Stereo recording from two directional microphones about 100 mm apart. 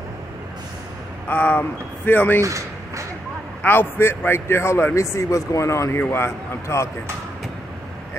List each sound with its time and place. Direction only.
1.3 s a man's voice: 20° left (ahead or behind)
2.4 s a sound: 30° right (ahead or behind)
3.6 s a man's voice: 20° left (ahead or behind)